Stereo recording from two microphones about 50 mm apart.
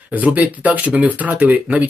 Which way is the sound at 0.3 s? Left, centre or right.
Right.